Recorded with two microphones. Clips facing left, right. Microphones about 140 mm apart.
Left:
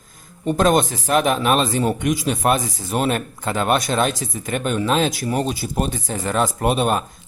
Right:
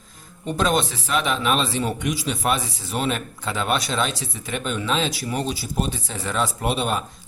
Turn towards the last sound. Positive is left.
turn(degrees=50)  # may be behind; listen again after turning